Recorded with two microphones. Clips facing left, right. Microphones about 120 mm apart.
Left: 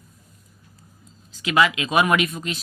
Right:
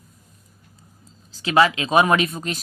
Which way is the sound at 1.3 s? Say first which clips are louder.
Right 2 dB; 35° right (ahead or behind).